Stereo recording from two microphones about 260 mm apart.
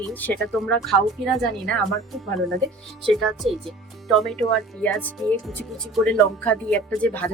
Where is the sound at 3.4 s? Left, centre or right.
Right.